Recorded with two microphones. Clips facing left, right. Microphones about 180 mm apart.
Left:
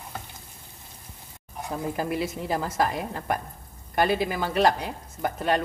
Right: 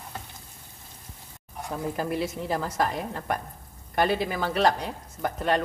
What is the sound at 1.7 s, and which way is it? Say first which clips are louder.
A woman's voice: left 1 dB; 10° left (ahead or behind).